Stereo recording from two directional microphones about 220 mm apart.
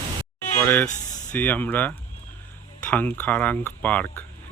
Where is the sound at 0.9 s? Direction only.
35° left (ahead or behind).